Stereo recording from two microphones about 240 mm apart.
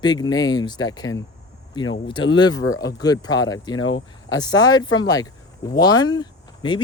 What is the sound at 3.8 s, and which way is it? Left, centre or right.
Speech, left.